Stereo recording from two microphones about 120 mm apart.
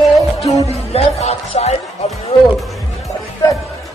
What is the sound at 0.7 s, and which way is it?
Music, 60° left (ahead or behind).